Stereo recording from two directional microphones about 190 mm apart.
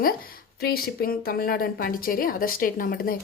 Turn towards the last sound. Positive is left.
turn(degrees=50)  # may be behind; listen again after turning